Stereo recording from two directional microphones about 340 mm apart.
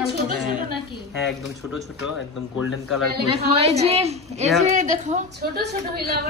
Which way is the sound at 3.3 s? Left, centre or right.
Centre.